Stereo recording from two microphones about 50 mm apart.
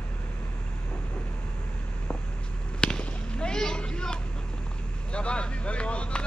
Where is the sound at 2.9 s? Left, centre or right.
Centre.